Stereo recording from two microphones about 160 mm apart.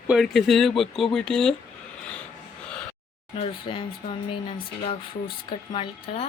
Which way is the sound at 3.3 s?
35° left (ahead or behind).